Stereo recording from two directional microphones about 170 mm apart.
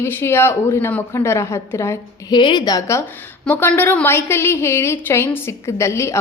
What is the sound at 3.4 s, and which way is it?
A woman's voice, 10° left (ahead or behind).